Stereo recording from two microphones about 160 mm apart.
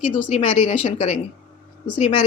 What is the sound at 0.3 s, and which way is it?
Speech, 40° left (ahead or behind).